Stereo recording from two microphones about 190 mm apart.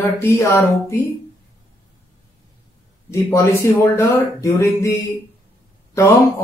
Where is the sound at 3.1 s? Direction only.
15° left (ahead or behind).